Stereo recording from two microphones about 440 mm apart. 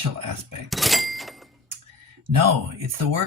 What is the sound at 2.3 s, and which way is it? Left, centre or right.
Speech, right.